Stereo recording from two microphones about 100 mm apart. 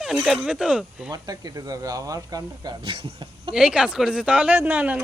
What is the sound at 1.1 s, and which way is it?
Speech, 40° right (ahead or behind).